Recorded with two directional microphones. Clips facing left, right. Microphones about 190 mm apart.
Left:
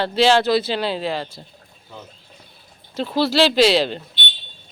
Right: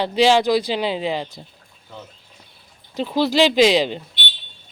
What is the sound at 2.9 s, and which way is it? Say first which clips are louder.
Speech: even; 15° right (ahead or behind).